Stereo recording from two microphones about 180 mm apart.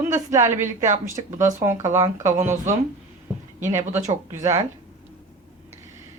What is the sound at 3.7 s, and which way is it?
Speech, 15° right (ahead or behind).